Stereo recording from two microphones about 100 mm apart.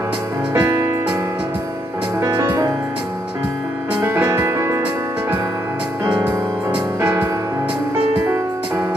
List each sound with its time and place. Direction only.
0.6 s music: 25° right (ahead or behind)
2.1 s music: 35° right (ahead or behind)
4.2 s music: 25° right (ahead or behind)
7.0 s music: 15° right (ahead or behind)